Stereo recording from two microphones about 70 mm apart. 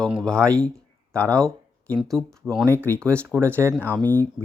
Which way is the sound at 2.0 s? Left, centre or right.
Centre.